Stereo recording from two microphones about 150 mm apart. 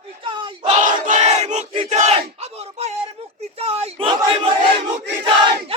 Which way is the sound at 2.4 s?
45° right (ahead or behind).